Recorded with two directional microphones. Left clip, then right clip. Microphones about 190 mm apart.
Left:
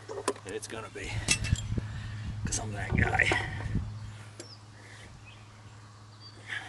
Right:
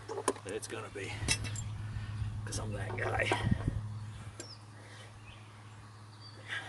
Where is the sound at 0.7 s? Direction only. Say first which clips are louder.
Left 2 dB; 30° left (ahead or behind).